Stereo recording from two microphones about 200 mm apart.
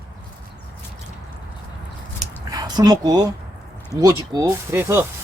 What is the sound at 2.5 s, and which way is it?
Speech, 20° right (ahead or behind).